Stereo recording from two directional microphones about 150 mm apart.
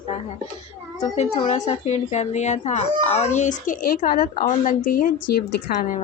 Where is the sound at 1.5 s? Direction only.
50° left (ahead or behind); by 5.9 s 90° left.